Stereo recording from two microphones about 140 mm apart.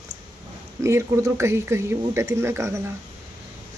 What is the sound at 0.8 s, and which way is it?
Speech, 20° right (ahead or behind).